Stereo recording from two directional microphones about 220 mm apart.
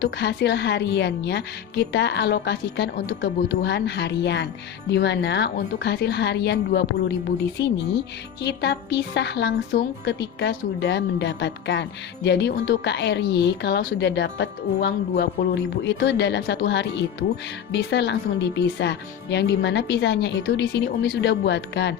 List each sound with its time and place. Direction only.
0.0 s a woman's voice: 50° left (ahead or behind)